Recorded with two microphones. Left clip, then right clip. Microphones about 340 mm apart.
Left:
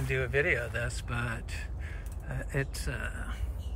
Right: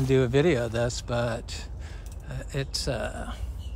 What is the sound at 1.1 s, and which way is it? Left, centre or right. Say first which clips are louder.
Speech: right 8 dB; centre.